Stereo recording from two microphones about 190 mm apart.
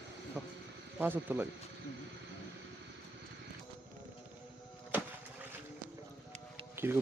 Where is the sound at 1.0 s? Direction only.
10° right (ahead or behind).